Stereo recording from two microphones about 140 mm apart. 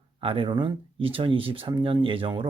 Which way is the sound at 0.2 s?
40° right (ahead or behind).